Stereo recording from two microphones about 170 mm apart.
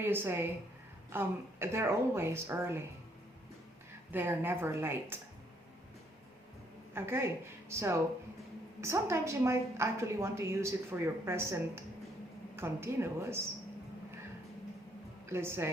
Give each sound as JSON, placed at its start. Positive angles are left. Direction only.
{"t": 0.0, "sound": "a woman's voice", "side_deg": -15}
{"t": 4.1, "sound": "a woman's voice", "side_deg": -10}
{"t": 6.9, "sound": "a woman's voice", "side_deg": -15}
{"t": 15.3, "sound": "a woman's voice", "side_deg": -15}